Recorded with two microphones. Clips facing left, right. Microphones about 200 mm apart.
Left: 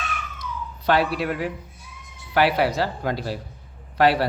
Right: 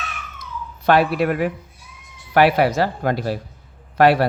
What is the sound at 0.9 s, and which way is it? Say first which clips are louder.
Speech: right 5 dB; 55° right (ahead or behind).